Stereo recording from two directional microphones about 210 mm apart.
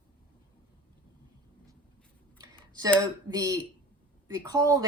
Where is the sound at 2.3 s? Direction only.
20° right (ahead or behind).